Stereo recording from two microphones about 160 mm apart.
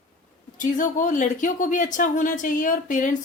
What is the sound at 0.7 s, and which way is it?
Speech, 55° left (ahead or behind).